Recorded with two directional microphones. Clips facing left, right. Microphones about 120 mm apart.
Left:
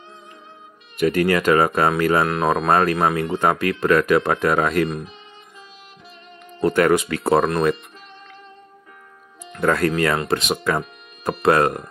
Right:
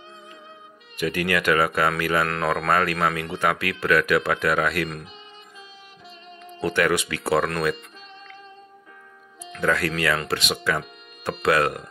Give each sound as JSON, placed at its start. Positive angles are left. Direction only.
{"t": 1.0, "sound": "speech", "side_deg": 35}
{"t": 6.6, "sound": "speech", "side_deg": 35}
{"t": 9.5, "sound": "speech", "side_deg": 40}